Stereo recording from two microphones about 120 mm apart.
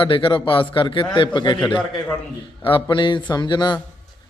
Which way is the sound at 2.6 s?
45° left (ahead or behind).